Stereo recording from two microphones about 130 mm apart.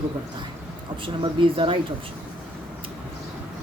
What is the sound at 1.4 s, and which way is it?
Speech, 40° right (ahead or behind).